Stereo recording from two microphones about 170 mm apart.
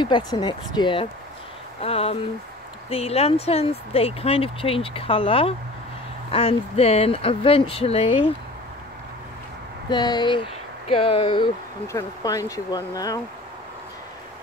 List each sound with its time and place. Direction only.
0.0 s speech: 25° left (ahead or behind)
9.8 s speech: 25° left (ahead or behind)
11.9 s speech: 20° left (ahead or behind)